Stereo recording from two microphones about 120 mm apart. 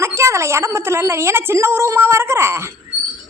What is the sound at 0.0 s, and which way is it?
A woman's voice, 20° right (ahead or behind).